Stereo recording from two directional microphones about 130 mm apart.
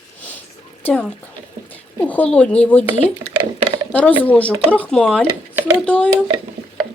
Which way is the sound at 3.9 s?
10° left (ahead or behind).